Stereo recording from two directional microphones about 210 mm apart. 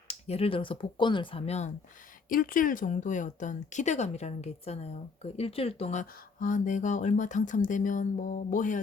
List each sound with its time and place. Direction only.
0.1 s speech: 30° left (ahead or behind)
2.3 s a woman's voice: 40° left (ahead or behind)